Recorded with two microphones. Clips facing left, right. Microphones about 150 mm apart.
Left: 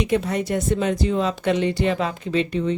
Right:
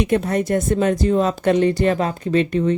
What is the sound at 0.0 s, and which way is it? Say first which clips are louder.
Speech: right 3 dB; 50° right (ahead or behind).